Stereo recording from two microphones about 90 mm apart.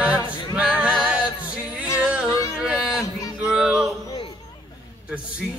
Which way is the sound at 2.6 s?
5° right (ahead or behind).